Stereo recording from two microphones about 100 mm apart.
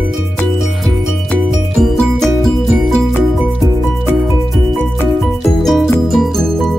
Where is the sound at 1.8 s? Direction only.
5° left (ahead or behind).